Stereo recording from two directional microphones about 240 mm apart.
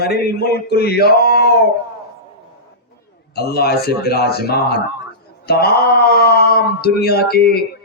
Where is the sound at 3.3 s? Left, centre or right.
Left.